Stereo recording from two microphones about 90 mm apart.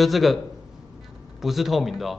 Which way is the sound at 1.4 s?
Centre (ahead or behind).